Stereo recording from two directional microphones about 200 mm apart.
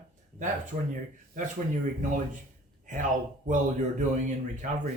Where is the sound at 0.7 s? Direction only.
40° right (ahead or behind).